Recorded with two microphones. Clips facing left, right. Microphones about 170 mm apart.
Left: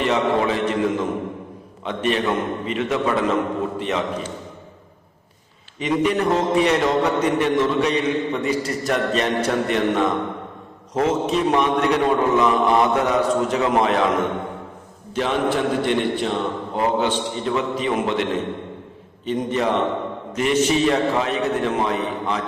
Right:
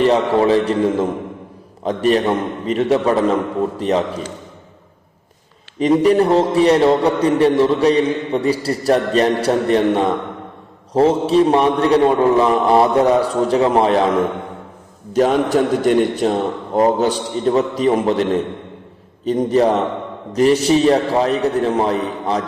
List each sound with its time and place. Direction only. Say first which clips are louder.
0.0 s a man's voice: right 5 dB; 35° right (ahead or behind)
5.8 s a man's voice: right 7 dB; 35° right (ahead or behind)
15.1 s a man's voice: right 6 dB; 40° right (ahead or behind)